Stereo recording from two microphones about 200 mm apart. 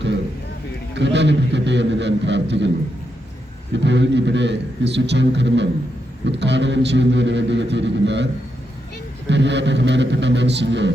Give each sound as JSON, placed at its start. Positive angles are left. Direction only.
{"t": 0.9, "sound": "a man's voice", "side_deg": -60}
{"t": 3.7, "sound": "a man's voice", "side_deg": -60}